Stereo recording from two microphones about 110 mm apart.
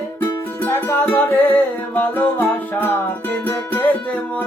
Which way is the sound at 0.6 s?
20° left (ahead or behind).